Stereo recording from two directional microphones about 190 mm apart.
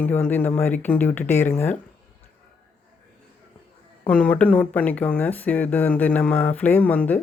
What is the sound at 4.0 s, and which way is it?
Speech, 5° left (ahead or behind).